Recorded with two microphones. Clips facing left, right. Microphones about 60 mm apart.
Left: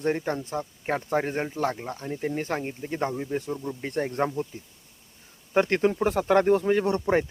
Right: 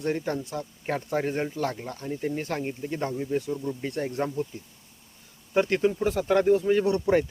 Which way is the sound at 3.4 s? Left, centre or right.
Left.